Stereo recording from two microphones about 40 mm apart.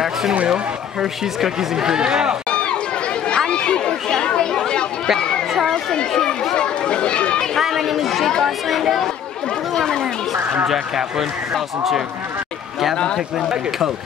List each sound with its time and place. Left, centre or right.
0.3 s speech: right
1.2 s speech: centre
2.5 s run: left
3.3 s chatter: left
5.9 s chatter: left
7.5 s chatter: centre
8.5 s a sound: centre
9.8 s a sound: centre
10.7 s speech: centre
12.9 s a man's voice: left